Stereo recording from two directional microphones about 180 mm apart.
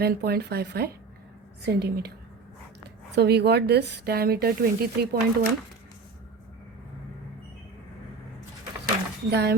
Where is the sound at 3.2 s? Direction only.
65° right (ahead or behind).